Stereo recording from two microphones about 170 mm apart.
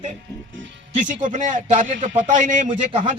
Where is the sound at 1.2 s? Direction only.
50° right (ahead or behind).